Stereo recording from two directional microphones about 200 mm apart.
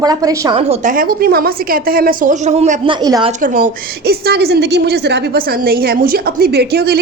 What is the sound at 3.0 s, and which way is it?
Speech, 20° right (ahead or behind).